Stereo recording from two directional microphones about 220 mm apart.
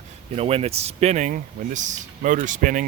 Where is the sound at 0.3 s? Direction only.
25° right (ahead or behind).